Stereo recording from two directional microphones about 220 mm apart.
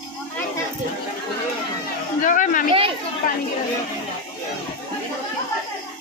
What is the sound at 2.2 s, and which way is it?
Speech, 35° left (ahead or behind).